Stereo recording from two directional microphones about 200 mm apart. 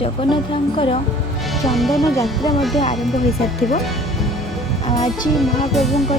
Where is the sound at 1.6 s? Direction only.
Centre (ahead or behind).